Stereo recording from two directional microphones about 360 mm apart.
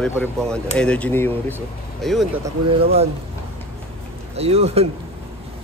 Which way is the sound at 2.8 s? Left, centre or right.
Centre.